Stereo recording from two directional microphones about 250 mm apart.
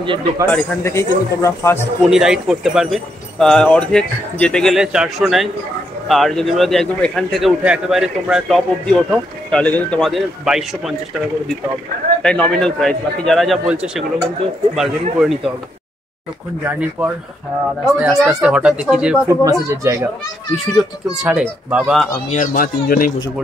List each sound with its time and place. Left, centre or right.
0.0 s speech: centre
0.5 s speech: centre
2.0 s a man's voice: centre
12.2 s a man's voice: centre
17.0 s a man's voice: centre
21.2 s a man's voice: centre
22.3 s speech: left